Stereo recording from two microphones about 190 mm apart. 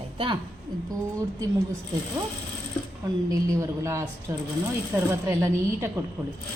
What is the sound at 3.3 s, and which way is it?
Speech, 15° right (ahead or behind).